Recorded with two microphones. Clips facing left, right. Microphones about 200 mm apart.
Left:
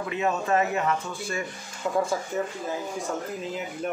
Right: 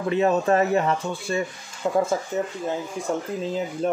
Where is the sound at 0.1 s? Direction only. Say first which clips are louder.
Right 6 dB; 35° right (ahead or behind).